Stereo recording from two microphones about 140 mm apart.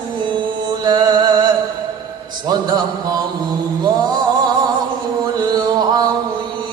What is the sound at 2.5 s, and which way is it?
Mantra, 30° right (ahead or behind).